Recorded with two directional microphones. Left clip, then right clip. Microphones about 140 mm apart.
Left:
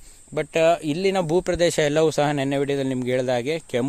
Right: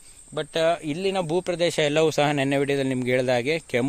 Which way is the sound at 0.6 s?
35° left (ahead or behind).